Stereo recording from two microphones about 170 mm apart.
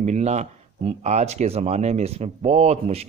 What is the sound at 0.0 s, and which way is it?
A man's voice, 40° right (ahead or behind).